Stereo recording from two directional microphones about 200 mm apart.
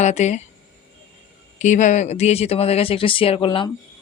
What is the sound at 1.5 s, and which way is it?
Speech, 35° left (ahead or behind).